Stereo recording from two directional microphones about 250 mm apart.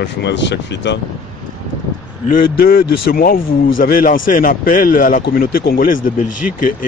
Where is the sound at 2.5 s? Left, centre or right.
Left.